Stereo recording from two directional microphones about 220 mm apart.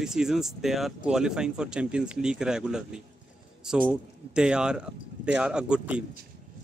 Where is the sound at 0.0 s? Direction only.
5° right (ahead or behind).